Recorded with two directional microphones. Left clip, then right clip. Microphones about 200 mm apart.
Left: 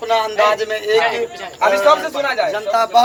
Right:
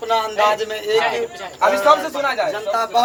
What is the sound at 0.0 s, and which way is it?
A man's voice, 25° left (ahead or behind).